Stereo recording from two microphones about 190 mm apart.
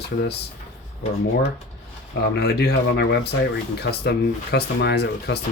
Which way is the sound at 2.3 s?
60° left (ahead or behind).